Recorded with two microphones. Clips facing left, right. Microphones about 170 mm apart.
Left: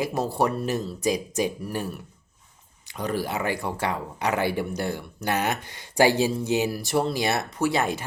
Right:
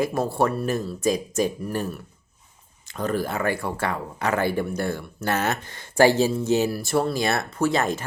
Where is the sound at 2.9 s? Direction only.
15° left (ahead or behind).